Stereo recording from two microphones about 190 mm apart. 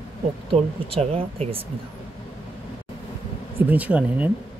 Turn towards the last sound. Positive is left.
turn(degrees=-5)  # may be behind; listen again after turning